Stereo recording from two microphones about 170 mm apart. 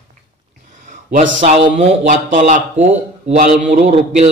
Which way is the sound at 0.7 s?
50° right (ahead or behind).